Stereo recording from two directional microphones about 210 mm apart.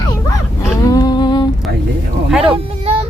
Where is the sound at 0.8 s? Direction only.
15° left (ahead or behind).